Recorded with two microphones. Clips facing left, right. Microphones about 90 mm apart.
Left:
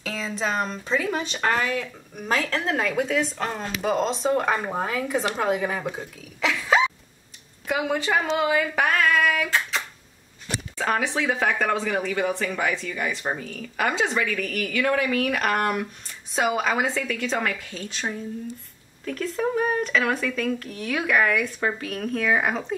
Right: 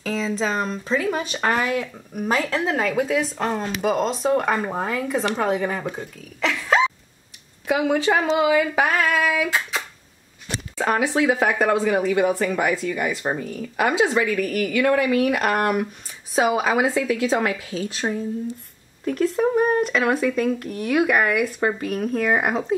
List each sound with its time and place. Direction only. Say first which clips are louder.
0.0 s speech: right 4 dB; centre (ahead or behind)
19.0 s speech: right 6 dB; 15° right (ahead or behind)